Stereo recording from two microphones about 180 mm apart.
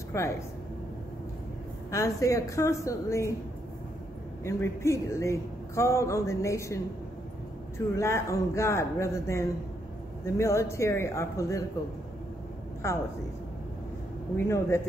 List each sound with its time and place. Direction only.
0.1 s a man's voice: 15° left (ahead or behind)
1.9 s a man's voice: 15° left (ahead or behind)
4.5 s a man's voice: 15° left (ahead or behind)
14.3 s a man's voice: 15° left (ahead or behind)